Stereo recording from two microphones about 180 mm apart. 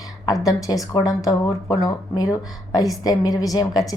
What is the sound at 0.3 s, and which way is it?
Speech, 20° left (ahead or behind).